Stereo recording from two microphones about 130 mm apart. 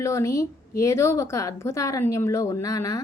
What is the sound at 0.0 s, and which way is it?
A woman's voice, 25° left (ahead or behind).